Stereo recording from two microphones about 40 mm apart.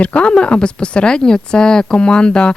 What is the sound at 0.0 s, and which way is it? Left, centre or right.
Speech, left.